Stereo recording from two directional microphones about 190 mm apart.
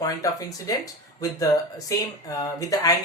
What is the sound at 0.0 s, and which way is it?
Speech, 20° left (ahead or behind).